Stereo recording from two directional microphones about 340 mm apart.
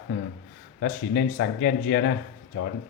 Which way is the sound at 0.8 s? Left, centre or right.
Left.